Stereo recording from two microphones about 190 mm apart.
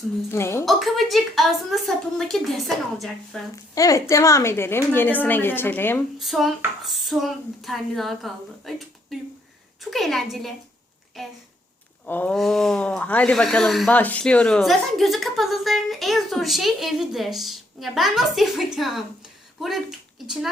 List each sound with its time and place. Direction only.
0.3 s a woman's voice: 15° left (ahead or behind)
0.6 s speech: centre (ahead or behind)
3.5 s a woman's voice: 15° left (ahead or behind)
6.1 s speech: centre (ahead or behind)